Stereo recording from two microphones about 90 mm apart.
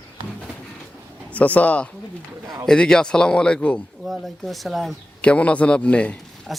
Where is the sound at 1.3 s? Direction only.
15° left (ahead or behind).